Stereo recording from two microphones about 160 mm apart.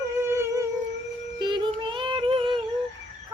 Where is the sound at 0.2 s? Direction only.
15° right (ahead or behind).